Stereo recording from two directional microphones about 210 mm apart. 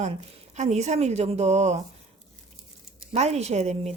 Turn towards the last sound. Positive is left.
turn(degrees=-30)  # may be behind; listen again after turning